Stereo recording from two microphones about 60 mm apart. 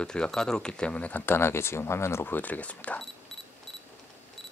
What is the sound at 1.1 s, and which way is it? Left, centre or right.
Speech, left.